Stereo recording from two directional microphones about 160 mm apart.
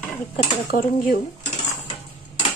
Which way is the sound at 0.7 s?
60° left (ahead or behind).